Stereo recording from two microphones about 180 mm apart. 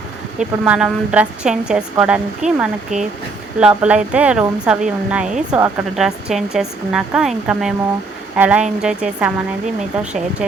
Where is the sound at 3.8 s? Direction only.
5° right (ahead or behind).